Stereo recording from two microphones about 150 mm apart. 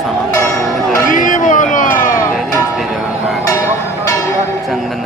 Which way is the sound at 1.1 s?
60° left (ahead or behind).